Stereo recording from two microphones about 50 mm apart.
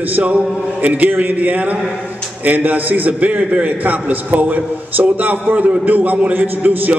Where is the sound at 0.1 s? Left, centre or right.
Right.